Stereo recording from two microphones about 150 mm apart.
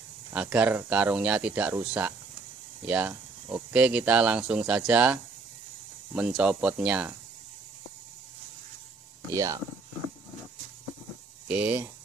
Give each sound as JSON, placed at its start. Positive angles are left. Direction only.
{"t": 0.3, "sound": "speech", "side_deg": -10}
{"t": 9.3, "sound": "speech", "side_deg": -20}
{"t": 11.4, "sound": "speech", "side_deg": -10}